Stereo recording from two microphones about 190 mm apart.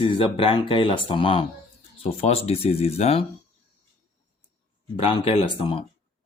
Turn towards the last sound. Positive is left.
turn(degrees=30)  # may be behind; listen again after turning